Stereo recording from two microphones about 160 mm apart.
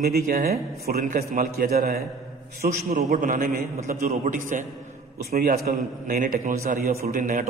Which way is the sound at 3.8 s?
50° right (ahead or behind).